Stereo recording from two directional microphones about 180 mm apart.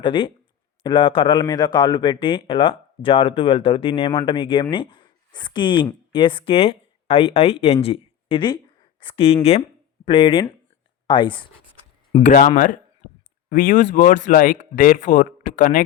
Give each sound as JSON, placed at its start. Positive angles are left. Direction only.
{"t": 0.0, "sound": "a man's voice", "side_deg": 25}
{"t": 12.2, "sound": "speech", "side_deg": 45}